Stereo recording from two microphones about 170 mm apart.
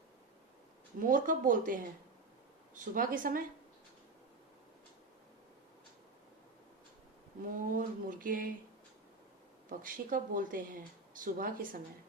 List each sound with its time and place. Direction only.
0.9 s speech: 55° right (ahead or behind)
7.7 s speech: 55° right (ahead or behind)
9.6 s speech: 55° right (ahead or behind)